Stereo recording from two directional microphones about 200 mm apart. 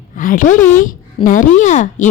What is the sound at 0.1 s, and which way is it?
A woman's voice, 40° left (ahead or behind).